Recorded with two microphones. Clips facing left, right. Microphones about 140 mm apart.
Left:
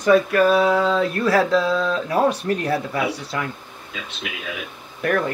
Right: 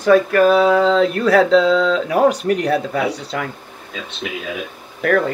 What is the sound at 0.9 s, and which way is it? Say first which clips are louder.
Speech: right 5 dB; 85° right.